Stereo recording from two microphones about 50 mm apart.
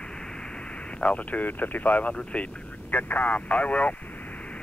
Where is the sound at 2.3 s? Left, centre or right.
Left.